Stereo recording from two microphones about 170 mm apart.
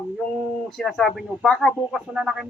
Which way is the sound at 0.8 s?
Centre (ahead or behind).